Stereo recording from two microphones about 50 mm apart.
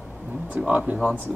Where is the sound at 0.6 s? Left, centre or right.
Right.